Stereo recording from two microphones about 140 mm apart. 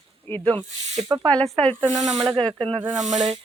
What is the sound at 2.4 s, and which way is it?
Speech, 30° right (ahead or behind).